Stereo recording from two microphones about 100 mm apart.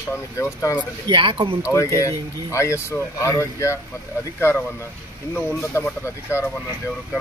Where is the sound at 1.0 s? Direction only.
55° right (ahead or behind).